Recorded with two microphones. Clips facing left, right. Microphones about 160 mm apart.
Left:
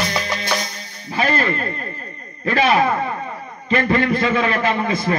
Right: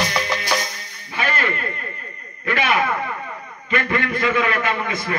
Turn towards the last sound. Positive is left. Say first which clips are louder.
# left 4 dB
turn(degrees=30)  # may be behind; listen again after turning